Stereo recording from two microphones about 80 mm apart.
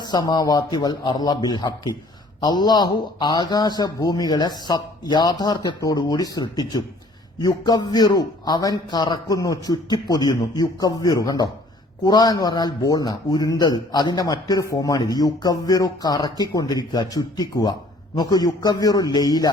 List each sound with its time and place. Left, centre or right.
0.0 s a man's voice: left